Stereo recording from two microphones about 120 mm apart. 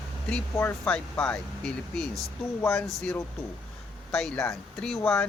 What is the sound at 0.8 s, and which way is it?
A man's voice, 10° left (ahead or behind).